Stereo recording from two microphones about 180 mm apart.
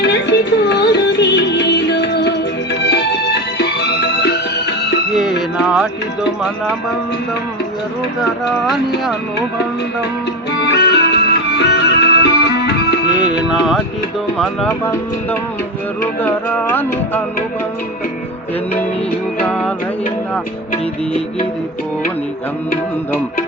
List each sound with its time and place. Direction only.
0.0 s music: 75° left (ahead or behind)
5.1 s music: 5° right (ahead or behind)
10.6 s music: 65° left (ahead or behind)
13.1 s speech: 5° right (ahead or behind)
16.2 s music: 10° left (ahead or behind)
19.4 s music: 5° left (ahead or behind)